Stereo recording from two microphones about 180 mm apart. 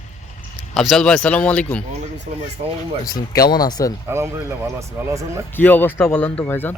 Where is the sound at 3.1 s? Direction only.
20° left (ahead or behind).